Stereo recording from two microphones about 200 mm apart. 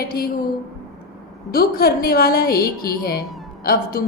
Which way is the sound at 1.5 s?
50° left (ahead or behind).